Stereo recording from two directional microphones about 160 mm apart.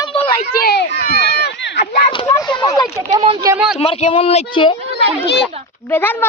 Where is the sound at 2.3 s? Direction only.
25° left (ahead or behind).